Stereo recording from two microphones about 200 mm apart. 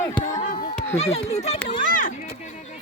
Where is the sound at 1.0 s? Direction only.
30° left (ahead or behind).